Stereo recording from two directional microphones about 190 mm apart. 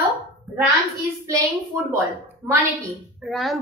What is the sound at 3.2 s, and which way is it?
Speech, centre (ahead or behind).